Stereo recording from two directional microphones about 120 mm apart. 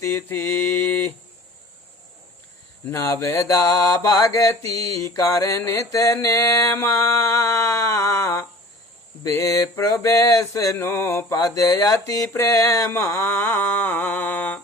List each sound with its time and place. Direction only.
0.0 s mantra: 25° left (ahead or behind)
2.9 s mantra: 25° left (ahead or behind)